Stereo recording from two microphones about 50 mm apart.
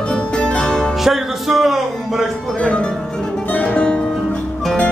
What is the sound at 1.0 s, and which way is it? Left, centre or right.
Music, centre.